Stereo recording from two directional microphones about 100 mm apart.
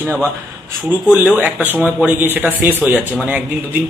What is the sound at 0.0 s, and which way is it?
Speech, 15° left (ahead or behind).